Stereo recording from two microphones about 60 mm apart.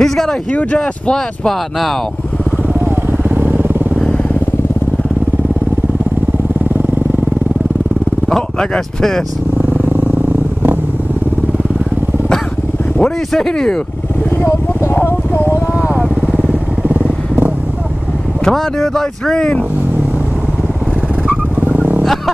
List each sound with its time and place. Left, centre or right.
0.0 s speech: centre
0.5 s speech: left
1.1 s speech: centre
2.7 s vehicle: right
8.3 s speech: centre
9.6 s vehicle: right
13.0 s speech: centre
15.0 s a sound: left
16.0 s vehicle: right
18.4 s speech: centre
21.5 s vehicle: right
22.0 s a sound: centre